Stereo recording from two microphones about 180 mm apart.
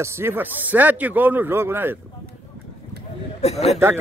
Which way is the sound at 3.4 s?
35° left (ahead or behind).